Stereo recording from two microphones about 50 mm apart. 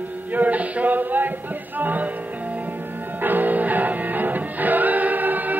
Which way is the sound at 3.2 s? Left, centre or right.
Right.